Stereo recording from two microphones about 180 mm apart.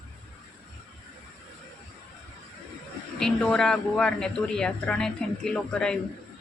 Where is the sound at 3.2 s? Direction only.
5° left (ahead or behind).